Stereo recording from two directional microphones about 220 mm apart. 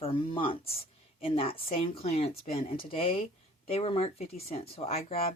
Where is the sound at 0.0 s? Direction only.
25° left (ahead or behind).